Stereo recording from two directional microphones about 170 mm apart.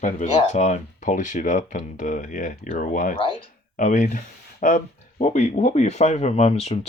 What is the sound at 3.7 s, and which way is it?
Speech, 50° left (ahead or behind).